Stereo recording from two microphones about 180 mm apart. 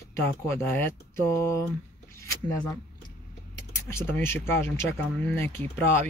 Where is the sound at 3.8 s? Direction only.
15° left (ahead or behind).